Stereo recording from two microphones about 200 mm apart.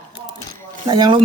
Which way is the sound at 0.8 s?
20° right (ahead or behind).